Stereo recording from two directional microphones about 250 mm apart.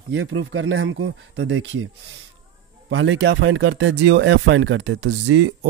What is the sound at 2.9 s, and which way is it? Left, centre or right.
Speech, right.